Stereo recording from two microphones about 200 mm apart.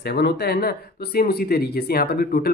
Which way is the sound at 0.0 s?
55° left (ahead or behind).